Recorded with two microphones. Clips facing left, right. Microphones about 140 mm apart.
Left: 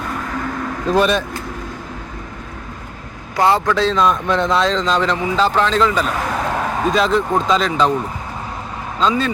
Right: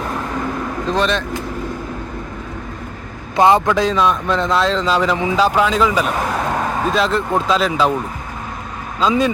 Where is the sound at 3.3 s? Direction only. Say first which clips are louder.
Right 3 dB; 20° right (ahead or behind).